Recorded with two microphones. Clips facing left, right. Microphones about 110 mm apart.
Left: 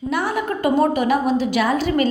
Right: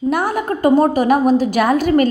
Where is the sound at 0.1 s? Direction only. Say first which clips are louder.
Right 2 dB; 45° right (ahead or behind).